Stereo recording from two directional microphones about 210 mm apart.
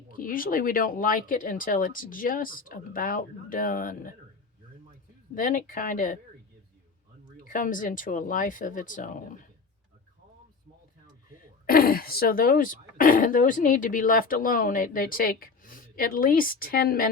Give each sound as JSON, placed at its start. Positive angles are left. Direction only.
{"t": 0.1, "sound": "speech", "side_deg": 40}
{"t": 5.3, "sound": "speech", "side_deg": 40}
{"t": 7.4, "sound": "speech", "side_deg": 40}
{"t": 11.6, "sound": "speech", "side_deg": 45}